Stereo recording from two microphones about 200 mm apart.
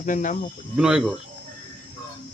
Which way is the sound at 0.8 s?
5° right (ahead or behind).